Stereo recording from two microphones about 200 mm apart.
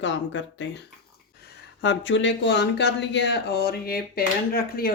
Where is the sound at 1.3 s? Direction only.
55° left (ahead or behind).